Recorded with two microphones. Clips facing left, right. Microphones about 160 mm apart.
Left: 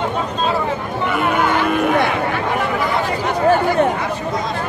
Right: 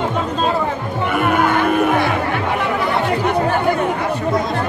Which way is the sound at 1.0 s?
55° right (ahead or behind).